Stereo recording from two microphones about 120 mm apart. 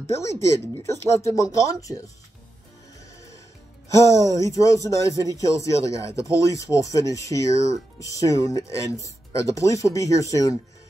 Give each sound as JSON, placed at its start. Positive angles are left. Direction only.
{"t": 0.1, "sound": "speech", "side_deg": 25}
{"t": 3.9, "sound": "speech", "side_deg": 25}